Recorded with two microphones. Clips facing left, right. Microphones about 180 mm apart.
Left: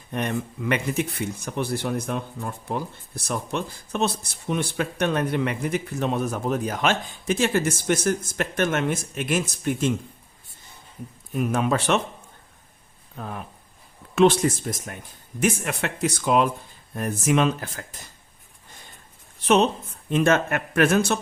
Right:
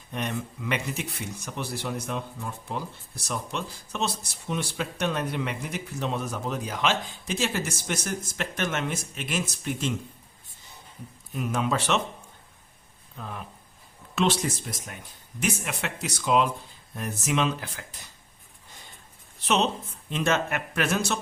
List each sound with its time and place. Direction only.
0.1 s speech: 55° left (ahead or behind)
11.3 s speech: 55° left (ahead or behind)
13.1 s speech: 50° left (ahead or behind)
20.1 s speech: 50° left (ahead or behind)